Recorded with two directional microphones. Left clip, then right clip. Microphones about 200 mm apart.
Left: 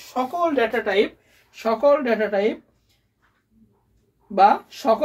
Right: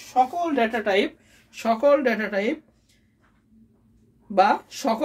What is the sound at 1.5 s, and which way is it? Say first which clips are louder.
Speech: left 1 dB; 50° right (ahead or behind).